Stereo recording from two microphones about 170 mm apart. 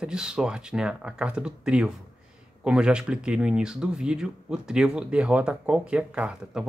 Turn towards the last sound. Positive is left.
turn(degrees=-5)  # may be behind; listen again after turning